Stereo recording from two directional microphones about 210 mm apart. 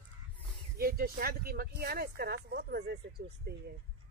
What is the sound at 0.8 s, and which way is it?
Speech, 45° right (ahead or behind).